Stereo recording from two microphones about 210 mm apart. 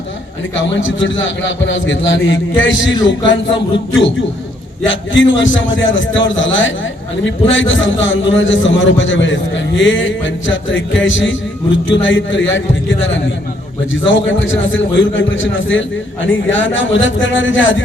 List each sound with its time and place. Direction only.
0.5 s a man's voice: 65° left (ahead or behind)